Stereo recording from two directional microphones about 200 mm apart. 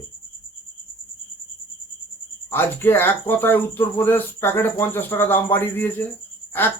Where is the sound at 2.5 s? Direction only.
10° left (ahead or behind).